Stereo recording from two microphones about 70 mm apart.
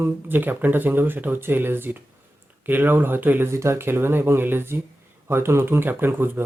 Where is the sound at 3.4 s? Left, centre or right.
Right.